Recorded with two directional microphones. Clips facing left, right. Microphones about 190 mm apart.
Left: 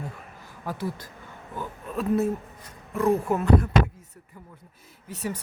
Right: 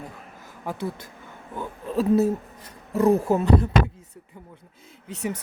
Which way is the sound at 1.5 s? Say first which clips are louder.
Right 5 dB; 30° right (ahead or behind).